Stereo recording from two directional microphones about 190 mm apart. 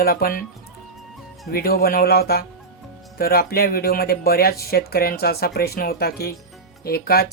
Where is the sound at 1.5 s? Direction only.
55° left (ahead or behind).